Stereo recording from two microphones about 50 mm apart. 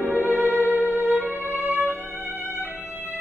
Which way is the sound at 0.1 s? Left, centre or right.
Right.